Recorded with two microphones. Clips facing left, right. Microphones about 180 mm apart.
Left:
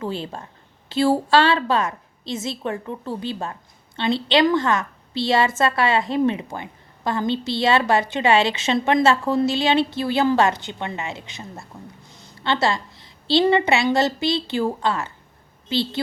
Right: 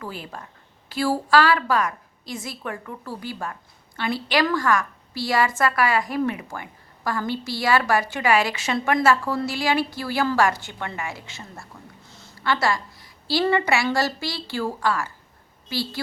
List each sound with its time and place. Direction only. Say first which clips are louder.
0.0 s a woman's voice: left 7 dB; 25° left (ahead or behind)